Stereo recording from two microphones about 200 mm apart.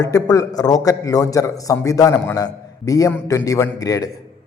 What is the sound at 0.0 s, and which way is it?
A man's voice, 15° left (ahead or behind).